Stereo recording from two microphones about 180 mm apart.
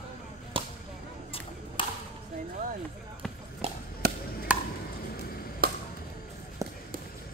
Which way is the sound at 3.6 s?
35° right (ahead or behind).